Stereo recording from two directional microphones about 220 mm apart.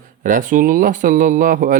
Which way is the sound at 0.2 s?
35° right (ahead or behind).